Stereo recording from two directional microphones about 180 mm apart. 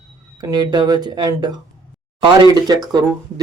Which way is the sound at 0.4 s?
25° right (ahead or behind).